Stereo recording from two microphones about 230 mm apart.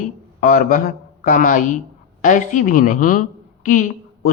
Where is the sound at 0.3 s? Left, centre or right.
Left.